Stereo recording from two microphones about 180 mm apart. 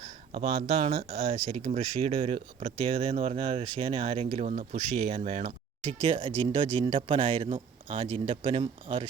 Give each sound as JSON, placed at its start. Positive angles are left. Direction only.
{"t": 0.8, "sound": "speech", "side_deg": -30}